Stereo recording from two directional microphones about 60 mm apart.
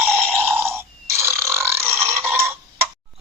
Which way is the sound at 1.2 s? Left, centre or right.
Right.